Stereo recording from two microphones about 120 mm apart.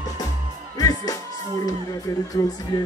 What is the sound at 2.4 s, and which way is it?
Speech, 30° left (ahead or behind).